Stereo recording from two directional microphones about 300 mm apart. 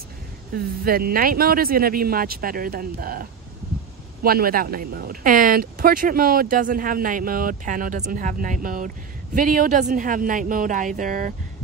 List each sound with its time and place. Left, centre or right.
0.8 s speech: right